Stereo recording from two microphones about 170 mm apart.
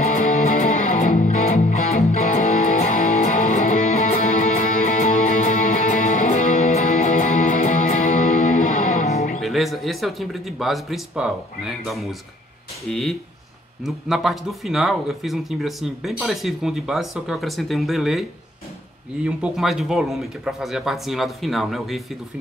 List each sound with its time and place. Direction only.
0.1 s music: 50° left (ahead or behind)
9.4 s speech: centre (ahead or behind)
19.2 s speech: 5° right (ahead or behind)